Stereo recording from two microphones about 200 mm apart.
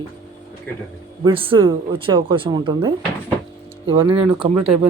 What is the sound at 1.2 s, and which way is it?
Speech, 25° right (ahead or behind).